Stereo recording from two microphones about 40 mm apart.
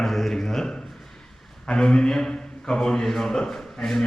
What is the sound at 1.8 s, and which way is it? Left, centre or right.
A man's voice, centre.